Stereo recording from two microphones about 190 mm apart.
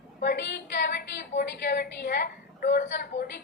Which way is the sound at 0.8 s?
60° left (ahead or behind).